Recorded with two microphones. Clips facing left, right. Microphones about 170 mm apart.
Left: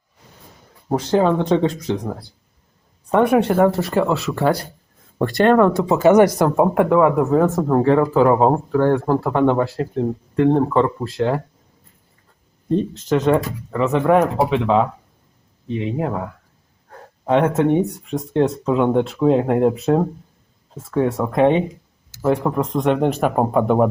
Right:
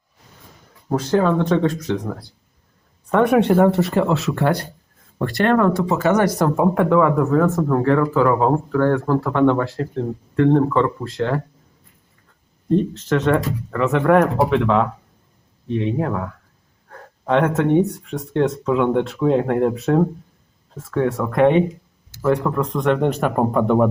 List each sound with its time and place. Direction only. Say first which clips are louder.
0.9 s speech: left 1 dB; 15° left (ahead or behind); by 4.5 s centre (ahead or behind)
5.1 s speech: left 3 dB; 20° left (ahead or behind)
12.6 s speech: right 1 dB; 10° left (ahead or behind)
14.0 s speech: right 1 dB; 10° left (ahead or behind)
17.2 s speech: left 1 dB; 10° left (ahead or behind)